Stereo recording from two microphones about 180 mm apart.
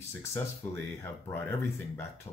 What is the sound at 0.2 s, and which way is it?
Speech, 10° left (ahead or behind).